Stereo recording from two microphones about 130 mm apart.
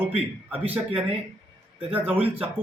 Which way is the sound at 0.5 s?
10° right (ahead or behind).